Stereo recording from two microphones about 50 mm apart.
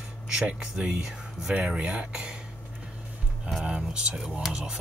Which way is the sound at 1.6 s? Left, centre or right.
Right.